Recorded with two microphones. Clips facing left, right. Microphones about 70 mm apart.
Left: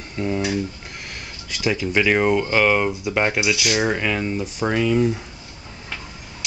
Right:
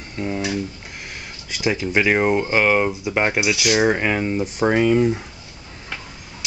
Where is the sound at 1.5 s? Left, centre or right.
Centre.